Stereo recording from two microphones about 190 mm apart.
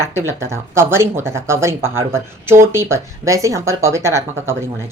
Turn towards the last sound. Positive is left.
turn(degrees=-15)  # may be behind; listen again after turning